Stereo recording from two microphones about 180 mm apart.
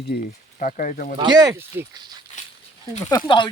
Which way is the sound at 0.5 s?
45° left (ahead or behind).